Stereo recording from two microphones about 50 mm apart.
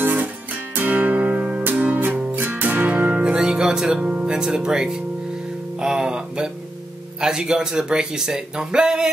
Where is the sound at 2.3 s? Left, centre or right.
Right.